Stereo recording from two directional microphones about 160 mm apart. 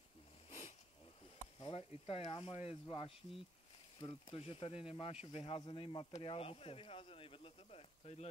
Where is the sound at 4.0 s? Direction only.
35° left (ahead or behind).